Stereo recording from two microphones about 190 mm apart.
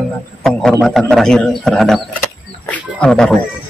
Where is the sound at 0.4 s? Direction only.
Centre (ahead or behind).